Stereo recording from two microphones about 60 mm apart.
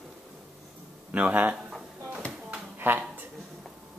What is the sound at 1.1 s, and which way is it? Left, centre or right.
Speech, right.